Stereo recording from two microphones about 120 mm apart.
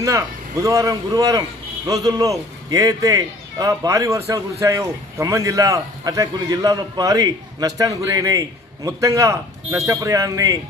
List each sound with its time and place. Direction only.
0.0 s a man's voice: 25° right (ahead or behind)